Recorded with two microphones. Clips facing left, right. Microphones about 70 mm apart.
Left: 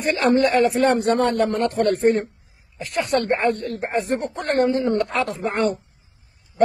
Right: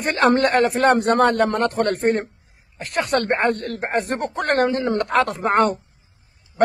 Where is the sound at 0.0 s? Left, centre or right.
Right.